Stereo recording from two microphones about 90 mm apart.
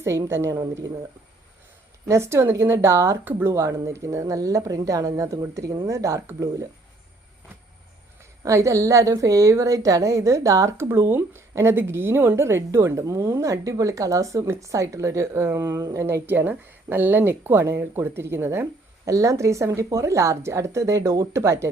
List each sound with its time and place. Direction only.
0.0 s a woman's voice: 30° right (ahead or behind)
2.0 s a woman's voice: 30° right (ahead or behind)
8.2 s a woman's voice: 35° right (ahead or behind)
16.2 s a woman's voice: 20° right (ahead or behind)